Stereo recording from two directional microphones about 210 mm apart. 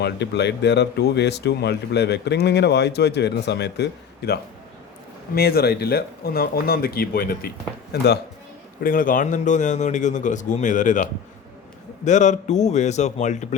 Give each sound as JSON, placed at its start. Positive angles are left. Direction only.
{"t": 0.0, "sound": "a man's voice", "side_deg": 55}